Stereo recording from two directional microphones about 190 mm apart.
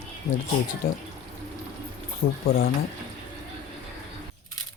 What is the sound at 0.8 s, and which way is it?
Speech, 50° left (ahead or behind).